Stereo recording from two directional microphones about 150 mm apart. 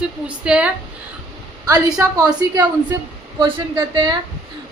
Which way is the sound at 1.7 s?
25° right (ahead or behind).